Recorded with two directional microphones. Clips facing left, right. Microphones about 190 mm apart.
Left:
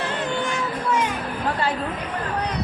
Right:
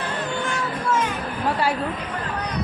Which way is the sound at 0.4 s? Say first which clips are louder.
Even; 15° left (ahead or behind).